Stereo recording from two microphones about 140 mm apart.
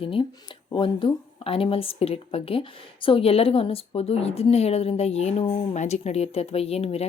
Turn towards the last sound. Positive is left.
turn(degrees=45)  # may be behind; listen again after turning